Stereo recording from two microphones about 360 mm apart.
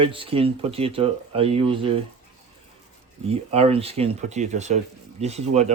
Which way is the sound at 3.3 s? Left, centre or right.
Centre.